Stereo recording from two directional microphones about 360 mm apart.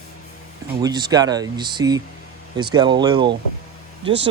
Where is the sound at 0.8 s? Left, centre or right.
Centre.